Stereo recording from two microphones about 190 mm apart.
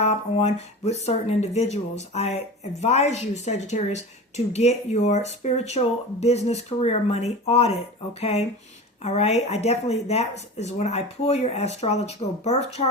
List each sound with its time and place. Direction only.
0.0 s speech: 35° left (ahead or behind)